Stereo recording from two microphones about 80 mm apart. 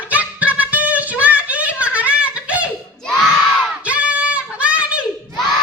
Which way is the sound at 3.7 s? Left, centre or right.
Centre.